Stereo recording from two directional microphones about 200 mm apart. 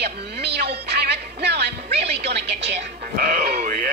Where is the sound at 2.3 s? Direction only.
60° right (ahead or behind).